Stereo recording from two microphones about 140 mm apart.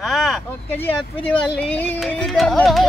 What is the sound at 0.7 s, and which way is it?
Speech, 15° left (ahead or behind).